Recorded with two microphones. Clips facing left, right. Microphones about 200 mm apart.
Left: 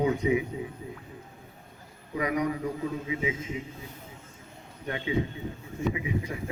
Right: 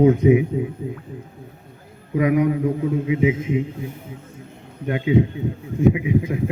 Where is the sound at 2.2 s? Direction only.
55° right (ahead or behind).